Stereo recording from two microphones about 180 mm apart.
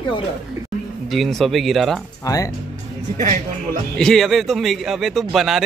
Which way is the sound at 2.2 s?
20° left (ahead or behind).